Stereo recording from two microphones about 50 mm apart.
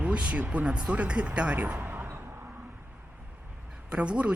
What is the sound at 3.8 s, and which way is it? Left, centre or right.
Speech, right.